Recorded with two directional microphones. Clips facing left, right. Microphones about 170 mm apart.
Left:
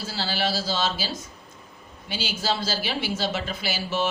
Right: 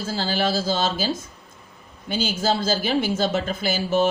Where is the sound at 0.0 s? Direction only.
50° right (ahead or behind).